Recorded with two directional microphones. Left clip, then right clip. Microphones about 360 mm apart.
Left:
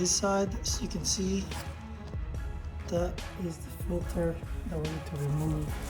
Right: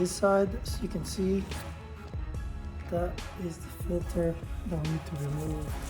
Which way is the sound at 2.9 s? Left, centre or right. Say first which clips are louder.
Even; centre.